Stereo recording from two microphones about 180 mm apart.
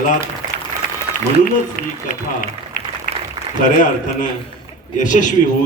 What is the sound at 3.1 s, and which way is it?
Applause, 50° left (ahead or behind).